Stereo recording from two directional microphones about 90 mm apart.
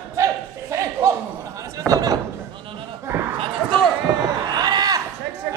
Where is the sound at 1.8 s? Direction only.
40° right (ahead or behind).